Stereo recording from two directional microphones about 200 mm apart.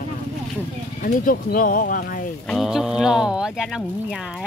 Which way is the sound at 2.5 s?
Centre (ahead or behind).